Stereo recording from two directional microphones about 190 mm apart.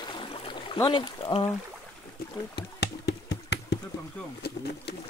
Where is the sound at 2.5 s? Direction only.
60° left (ahead or behind).